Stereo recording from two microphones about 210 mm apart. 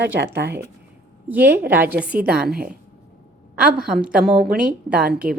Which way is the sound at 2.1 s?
45° right (ahead or behind).